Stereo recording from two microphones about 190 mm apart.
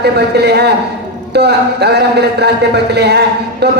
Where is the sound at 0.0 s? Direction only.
60° right (ahead or behind).